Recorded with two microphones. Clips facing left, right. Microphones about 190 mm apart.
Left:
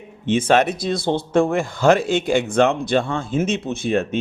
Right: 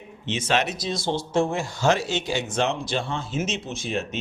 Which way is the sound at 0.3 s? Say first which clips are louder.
Left 8 dB; 55° left (ahead or behind).